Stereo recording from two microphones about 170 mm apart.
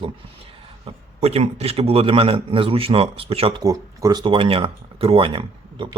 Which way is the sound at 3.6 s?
20° right (ahead or behind).